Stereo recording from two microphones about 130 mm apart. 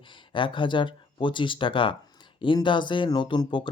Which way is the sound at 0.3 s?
40° left (ahead or behind).